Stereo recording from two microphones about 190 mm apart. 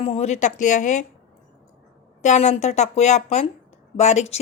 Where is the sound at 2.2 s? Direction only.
35° left (ahead or behind).